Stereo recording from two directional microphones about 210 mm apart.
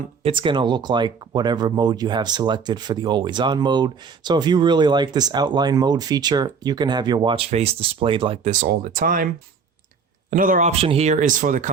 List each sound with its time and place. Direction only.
0.2 s speech: 25° right (ahead or behind)
8.4 s speech: 40° right (ahead or behind)